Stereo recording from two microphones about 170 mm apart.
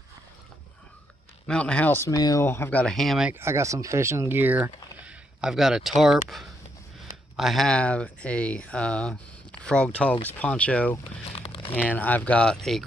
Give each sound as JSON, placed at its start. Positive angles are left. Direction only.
{"t": 1.5, "sound": "speech", "side_deg": 5}
{"t": 3.3, "sound": "speech", "side_deg": -15}
{"t": 11.3, "sound": "crumpling", "side_deg": 30}
{"t": 11.7, "sound": "speech", "side_deg": 10}